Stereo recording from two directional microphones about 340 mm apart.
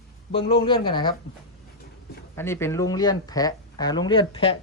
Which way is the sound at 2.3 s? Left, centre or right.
Centre.